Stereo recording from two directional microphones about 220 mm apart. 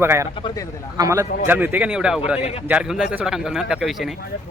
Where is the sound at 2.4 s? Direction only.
30° left (ahead or behind).